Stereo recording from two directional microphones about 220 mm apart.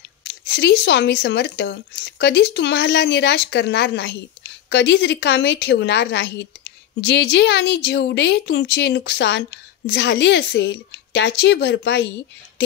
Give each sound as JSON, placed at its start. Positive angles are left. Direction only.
{"t": 0.2, "sound": "speech", "side_deg": 50}